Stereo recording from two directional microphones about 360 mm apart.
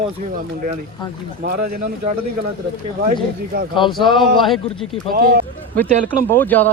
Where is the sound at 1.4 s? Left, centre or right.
Right.